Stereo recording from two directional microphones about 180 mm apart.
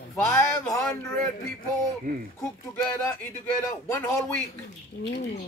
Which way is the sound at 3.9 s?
20° left (ahead or behind).